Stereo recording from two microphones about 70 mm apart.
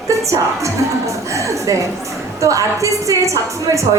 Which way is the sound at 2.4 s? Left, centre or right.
Right.